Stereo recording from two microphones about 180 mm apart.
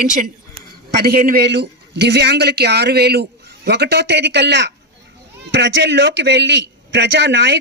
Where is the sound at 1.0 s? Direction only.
60° right (ahead or behind).